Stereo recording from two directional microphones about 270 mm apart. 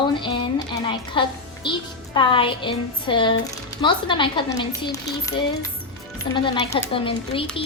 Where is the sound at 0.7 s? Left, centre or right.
Centre.